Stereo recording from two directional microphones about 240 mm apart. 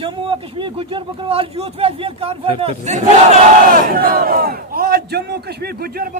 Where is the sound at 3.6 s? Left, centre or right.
Right.